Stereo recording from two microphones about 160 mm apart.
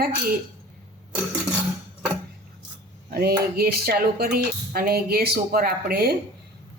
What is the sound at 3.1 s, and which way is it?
Speech, 75° right (ahead or behind).